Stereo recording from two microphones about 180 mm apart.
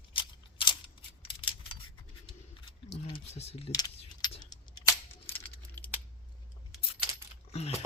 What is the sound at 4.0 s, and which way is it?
Keys jangling, 30° left (ahead or behind).